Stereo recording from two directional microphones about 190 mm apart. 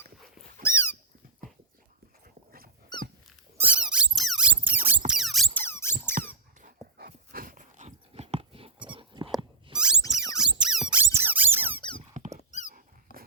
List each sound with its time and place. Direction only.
0.6 s cat: 10° left (ahead or behind)
1.4 s dog: 45° right (ahead or behind)
2.9 s dog: 20° left (ahead or behind)
3.6 s squeak: 5° right (ahead or behind)
5.5 s squeak: 15° left (ahead or behind)
6.1 s dog: 45° right (ahead or behind); by 8.7 s 30° right (ahead or behind)
9.0 s a sound: 25° right (ahead or behind)
9.7 s a sound: 5° right (ahead or behind)
10.1 s rodents: 5° right (ahead or behind)
10.6 s squeak: 5° right (ahead or behind)
11.8 s squeak: 25° left (ahead or behind)
12.1 s squeak: 35° right (ahead or behind)
12.5 s dog: 40° left (ahead or behind)
13.1 s a sound: 45° left (ahead or behind)